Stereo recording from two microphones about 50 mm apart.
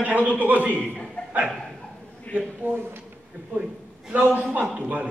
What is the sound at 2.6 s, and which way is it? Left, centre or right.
Speech, right.